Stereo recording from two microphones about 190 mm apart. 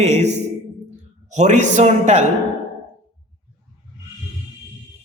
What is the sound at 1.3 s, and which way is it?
Speech, 40° right (ahead or behind).